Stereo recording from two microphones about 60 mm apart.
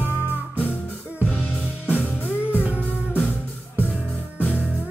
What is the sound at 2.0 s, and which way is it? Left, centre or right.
Music, left.